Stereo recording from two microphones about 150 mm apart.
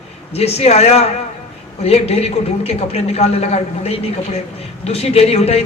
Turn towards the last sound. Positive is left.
turn(degrees=45)  # may be behind; listen again after turning